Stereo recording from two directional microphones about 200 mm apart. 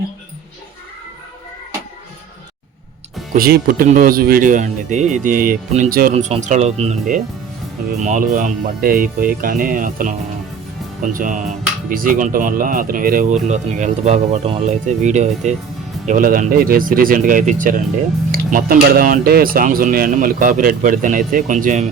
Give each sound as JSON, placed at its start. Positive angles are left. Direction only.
{"t": 3.3, "sound": "speech", "side_deg": -45}